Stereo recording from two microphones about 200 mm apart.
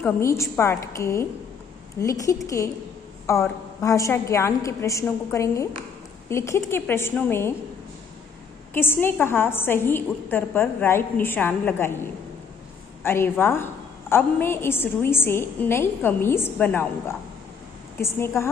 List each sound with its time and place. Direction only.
0.0 s a woman's voice: 15° left (ahead or behind)
8.7 s a woman's voice: 10° left (ahead or behind)
17.9 s a woman's voice: 10° left (ahead or behind)